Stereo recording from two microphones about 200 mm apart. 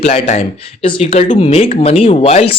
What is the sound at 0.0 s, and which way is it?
Speech, 35° left (ahead or behind).